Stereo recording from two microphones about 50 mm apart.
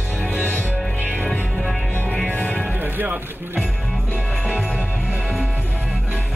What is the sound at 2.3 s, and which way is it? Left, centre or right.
Music, left.